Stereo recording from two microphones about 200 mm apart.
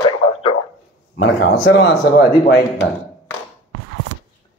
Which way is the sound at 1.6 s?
60° left (ahead or behind).